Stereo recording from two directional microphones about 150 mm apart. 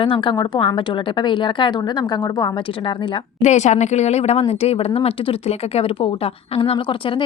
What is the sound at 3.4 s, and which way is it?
A woman's voice, 50° left (ahead or behind).